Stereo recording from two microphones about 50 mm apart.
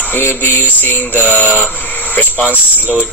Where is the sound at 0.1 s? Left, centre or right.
Left.